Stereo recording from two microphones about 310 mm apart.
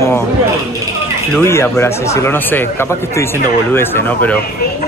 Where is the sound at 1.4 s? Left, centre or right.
Centre.